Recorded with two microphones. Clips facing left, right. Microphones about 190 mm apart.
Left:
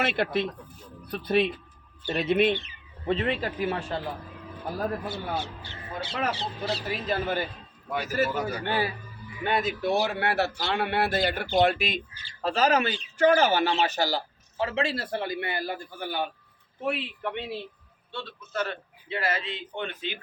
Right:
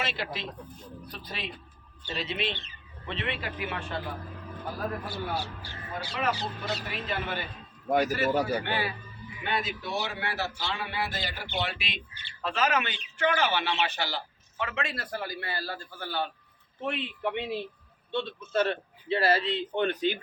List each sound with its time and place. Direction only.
0.0 s a man's voice: 55° left (ahead or behind)
3.1 s speech: 40° left (ahead or behind)
5.0 s speech: 20° left (ahead or behind); by 7.4 s 40° left (ahead or behind)
7.9 s a man's voice: 45° right (ahead or behind)
8.3 s a man's voice: 30° right (ahead or behind)
8.6 s a man's voice: 40° left (ahead or behind); by 11.4 s 60° left (ahead or behind)
11.4 s speech: 45° left (ahead or behind); by 17.1 s 5° left (ahead or behind)
17.2 s a man's voice: 15° right (ahead or behind); by 20.1 s 40° right (ahead or behind)